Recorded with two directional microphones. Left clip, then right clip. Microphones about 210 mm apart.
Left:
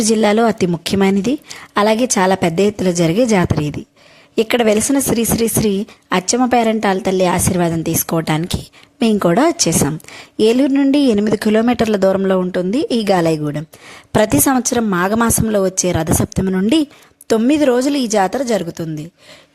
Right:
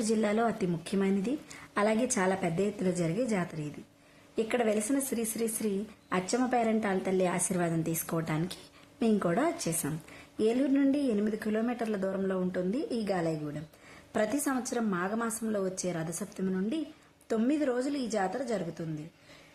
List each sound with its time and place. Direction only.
0.1 s a woman's voice: 40° left (ahead or behind)